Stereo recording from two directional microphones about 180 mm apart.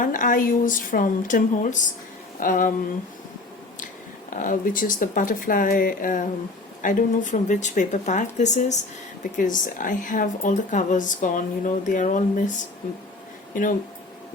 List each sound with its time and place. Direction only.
0.0 s a woman's voice: 45° left (ahead or behind)
4.4 s a woman's voice: 50° left (ahead or behind)
13.5 s speech: 45° left (ahead or behind)